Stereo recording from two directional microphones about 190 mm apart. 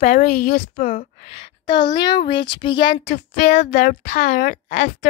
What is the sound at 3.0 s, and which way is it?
A woman's voice, 40° left (ahead or behind).